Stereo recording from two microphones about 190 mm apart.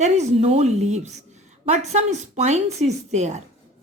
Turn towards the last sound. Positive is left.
turn(degrees=-35)  # may be behind; listen again after turning